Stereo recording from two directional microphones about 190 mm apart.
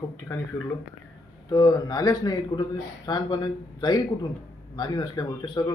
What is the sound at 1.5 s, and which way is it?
Speech, 20° left (ahead or behind).